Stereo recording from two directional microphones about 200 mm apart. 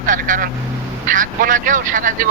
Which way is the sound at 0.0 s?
40° right (ahead or behind).